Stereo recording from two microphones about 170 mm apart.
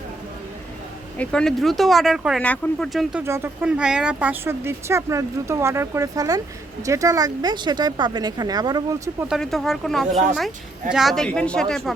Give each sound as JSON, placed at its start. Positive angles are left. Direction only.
{"t": 1.2, "sound": "speech", "side_deg": 5}
{"t": 3.2, "sound": "speech", "side_deg": -15}
{"t": 9.2, "sound": "speech", "side_deg": 0}